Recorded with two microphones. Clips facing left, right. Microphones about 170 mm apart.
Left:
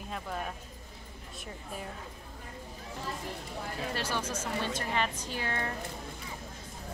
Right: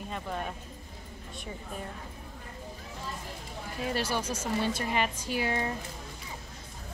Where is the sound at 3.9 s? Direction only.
10° right (ahead or behind).